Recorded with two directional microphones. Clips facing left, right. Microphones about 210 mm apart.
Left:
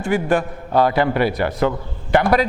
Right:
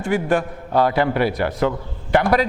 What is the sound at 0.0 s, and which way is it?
Speech, 15° left (ahead or behind).